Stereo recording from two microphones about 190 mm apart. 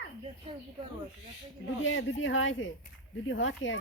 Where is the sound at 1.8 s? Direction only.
75° left (ahead or behind).